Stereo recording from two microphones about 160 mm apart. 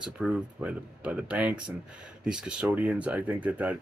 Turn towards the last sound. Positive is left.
turn(degrees=-10)  # may be behind; listen again after turning